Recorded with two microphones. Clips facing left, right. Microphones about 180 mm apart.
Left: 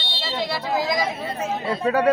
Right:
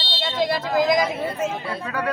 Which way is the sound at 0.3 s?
50° right (ahead or behind).